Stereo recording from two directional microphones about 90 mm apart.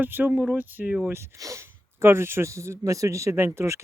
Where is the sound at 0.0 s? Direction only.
20° right (ahead or behind).